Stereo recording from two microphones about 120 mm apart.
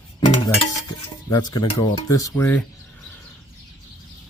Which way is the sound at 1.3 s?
35° left (ahead or behind).